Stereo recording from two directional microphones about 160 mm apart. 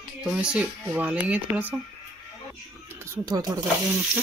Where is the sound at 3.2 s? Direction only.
25° right (ahead or behind).